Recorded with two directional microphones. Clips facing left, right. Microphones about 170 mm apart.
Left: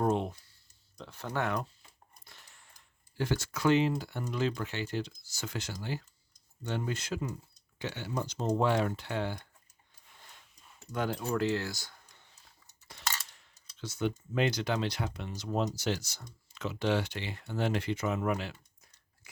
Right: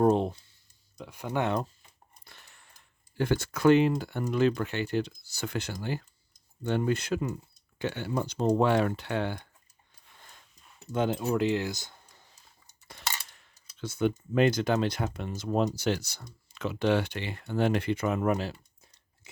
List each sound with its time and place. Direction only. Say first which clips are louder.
0.0 s speech: right 6 dB; 35° right (ahead or behind)
0.9 s speech: right 4 dB; 10° right (ahead or behind)
2.2 s a sound: right 3 dB; 60° right (ahead or behind)
3.2 s coin: right 5 dB; 55° right (ahead or behind)
10.8 s speech: right 5 dB; 20° right (ahead or behind)
12.9 s coin: right 1 dB; 55° right (ahead or behind)
19.2 s a sound: right 5 dB; 25° right (ahead or behind)